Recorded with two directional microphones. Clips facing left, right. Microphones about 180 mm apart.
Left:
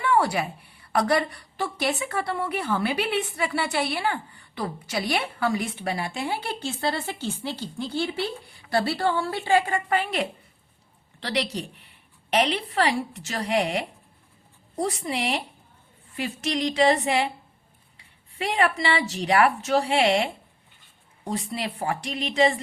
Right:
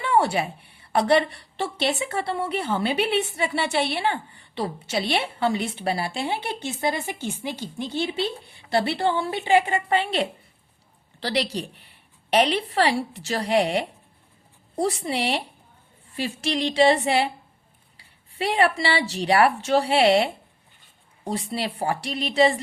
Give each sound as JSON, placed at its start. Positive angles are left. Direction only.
{"t": 0.0, "sound": "a woman's voice", "side_deg": -25}